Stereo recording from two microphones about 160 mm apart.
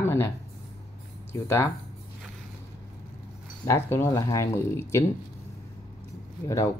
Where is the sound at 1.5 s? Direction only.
15° left (ahead or behind).